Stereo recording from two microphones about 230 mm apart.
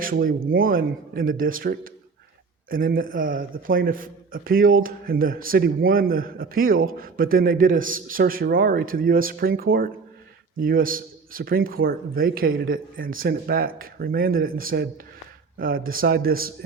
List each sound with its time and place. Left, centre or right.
0.0 s a man's voice: right